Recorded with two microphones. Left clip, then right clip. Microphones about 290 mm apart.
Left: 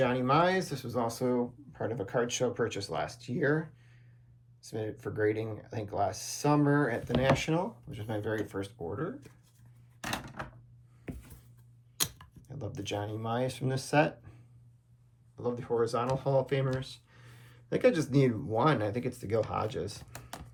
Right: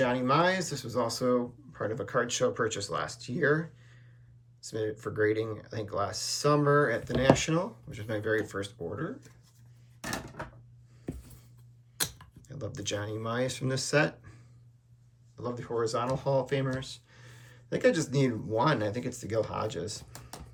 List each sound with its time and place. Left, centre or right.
0.0 s speech: centre
10.0 s a sound: left
11.9 s speech: centre
15.4 s speech: centre